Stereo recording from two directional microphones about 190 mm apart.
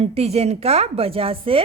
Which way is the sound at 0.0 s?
35° right (ahead or behind).